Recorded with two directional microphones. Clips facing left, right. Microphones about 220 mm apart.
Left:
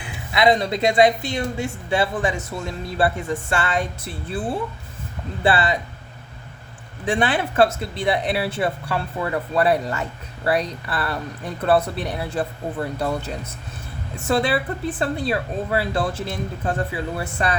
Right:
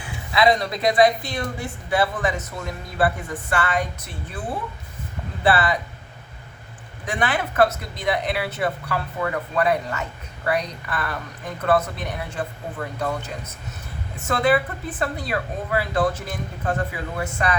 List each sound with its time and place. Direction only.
0.3 s a woman's voice: 25° left (ahead or behind)
5.4 s a woman's voice: 25° left (ahead or behind)
7.0 s a woman's voice: 30° left (ahead or behind)
14.3 s a woman's voice: 30° left (ahead or behind)